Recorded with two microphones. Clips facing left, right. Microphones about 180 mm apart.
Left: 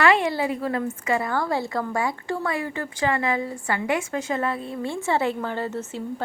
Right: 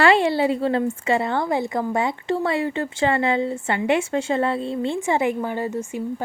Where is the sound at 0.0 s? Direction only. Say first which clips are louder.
Right 3 dB; 30° right (ahead or behind).